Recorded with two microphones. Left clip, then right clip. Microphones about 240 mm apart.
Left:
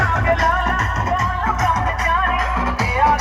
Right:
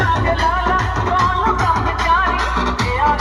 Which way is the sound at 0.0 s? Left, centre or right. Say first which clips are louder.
Even; centre.